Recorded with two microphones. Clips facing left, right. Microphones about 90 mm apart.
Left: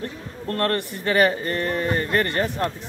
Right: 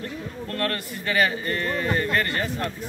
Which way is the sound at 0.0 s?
35° left (ahead or behind).